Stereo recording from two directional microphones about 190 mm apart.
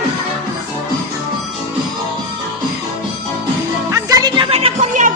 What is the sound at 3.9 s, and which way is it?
Music, 15° right (ahead or behind).